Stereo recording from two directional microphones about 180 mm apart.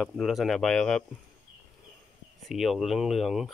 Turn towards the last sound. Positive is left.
turn(degrees=0)  # may be behind; listen again after turning